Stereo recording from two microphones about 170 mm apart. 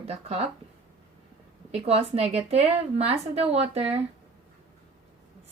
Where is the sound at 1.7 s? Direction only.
35° right (ahead or behind).